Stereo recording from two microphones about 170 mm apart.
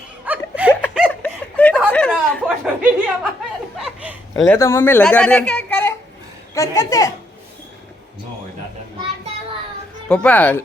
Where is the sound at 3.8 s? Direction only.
5° right (ahead or behind).